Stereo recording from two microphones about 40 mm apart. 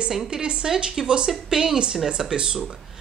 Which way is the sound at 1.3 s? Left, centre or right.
Centre.